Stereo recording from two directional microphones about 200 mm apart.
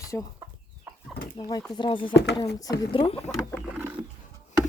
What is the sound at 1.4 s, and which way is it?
Speech, 20° left (ahead or behind).